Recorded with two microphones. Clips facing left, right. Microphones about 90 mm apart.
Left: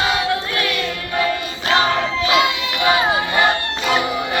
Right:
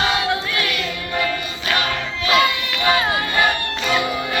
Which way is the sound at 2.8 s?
5° left (ahead or behind).